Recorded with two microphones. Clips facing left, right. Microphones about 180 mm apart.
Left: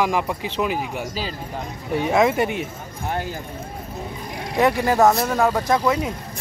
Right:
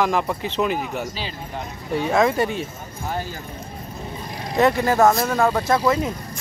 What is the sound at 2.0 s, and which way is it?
Speech, 20° left (ahead or behind).